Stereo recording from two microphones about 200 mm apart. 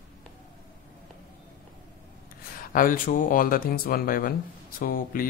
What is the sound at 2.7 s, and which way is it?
Speech, 45° left (ahead or behind).